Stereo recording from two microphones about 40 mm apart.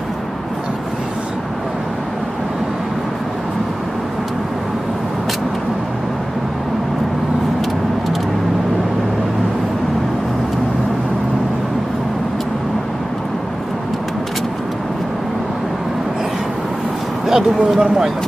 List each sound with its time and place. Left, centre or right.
17.3 s speech: centre